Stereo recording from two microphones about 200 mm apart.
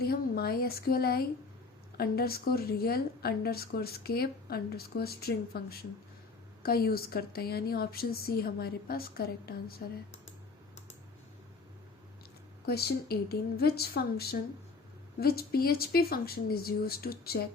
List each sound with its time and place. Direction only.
0.0 s speech: 50° left (ahead or behind)
12.6 s speech: 50° left (ahead or behind)